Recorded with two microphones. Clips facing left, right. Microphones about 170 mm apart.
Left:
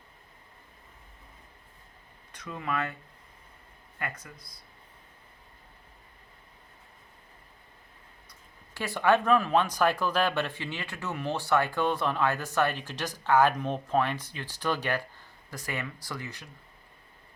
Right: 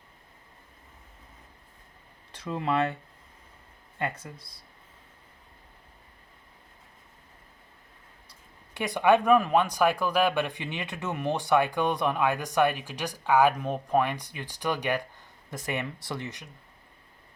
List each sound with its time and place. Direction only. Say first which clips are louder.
2.3 s speech: right 5 dB; 30° right (ahead or behind)
3.9 s speech: right 5 dB; 30° right (ahead or behind)
8.7 s speech: right 3 dB; 15° right (ahead or behind)